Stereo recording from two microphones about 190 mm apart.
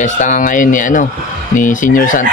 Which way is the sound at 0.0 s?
40° left (ahead or behind).